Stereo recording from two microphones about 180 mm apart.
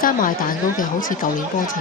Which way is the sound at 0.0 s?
50° left (ahead or behind).